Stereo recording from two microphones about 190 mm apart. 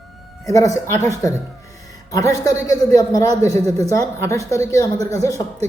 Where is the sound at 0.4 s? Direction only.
15° left (ahead or behind).